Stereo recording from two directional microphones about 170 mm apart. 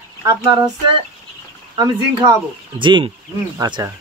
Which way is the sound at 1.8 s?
25° right (ahead or behind).